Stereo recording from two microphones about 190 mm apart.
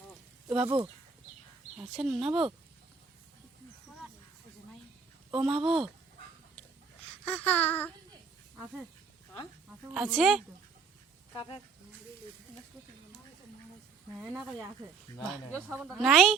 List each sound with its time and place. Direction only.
0.4 s speech: 5° right (ahead or behind)
5.3 s speech: 5° right (ahead or behind)
7.3 s a sound: 10° left (ahead or behind)
9.9 s speech: centre (ahead or behind)
11.3 s speech: 25° left (ahead or behind)
15.1 s a sound: 10° left (ahead or behind)
15.7 s speech: 5° right (ahead or behind)